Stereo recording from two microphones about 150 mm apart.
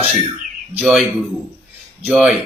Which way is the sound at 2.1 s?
Centre (ahead or behind).